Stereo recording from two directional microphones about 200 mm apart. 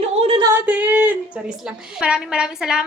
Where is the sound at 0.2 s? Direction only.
30° right (ahead or behind).